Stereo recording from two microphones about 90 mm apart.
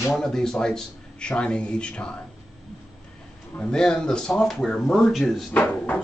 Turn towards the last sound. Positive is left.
turn(degrees=15)  # may be behind; listen again after turning